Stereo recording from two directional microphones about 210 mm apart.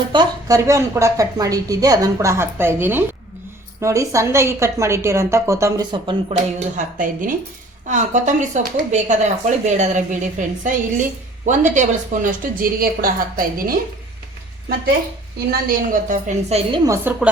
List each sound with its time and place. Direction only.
0.1 s a woman's voice: 20° right (ahead or behind); by 13.7 s 45° right (ahead or behind)
15.4 s a woman's voice: 40° right (ahead or behind)
16.7 s a woman's voice: 15° right (ahead or behind)